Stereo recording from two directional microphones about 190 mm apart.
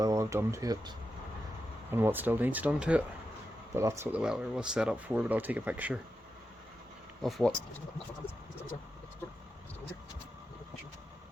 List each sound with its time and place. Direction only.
0.0 s speech: 15° right (ahead or behind)
7.2 s speech: centre (ahead or behind)